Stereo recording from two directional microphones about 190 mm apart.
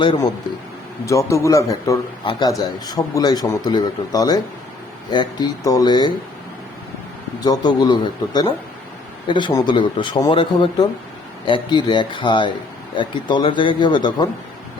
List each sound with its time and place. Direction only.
0.0 s a man's voice: 25° left (ahead or behind)
7.4 s a man's voice: 20° left (ahead or behind)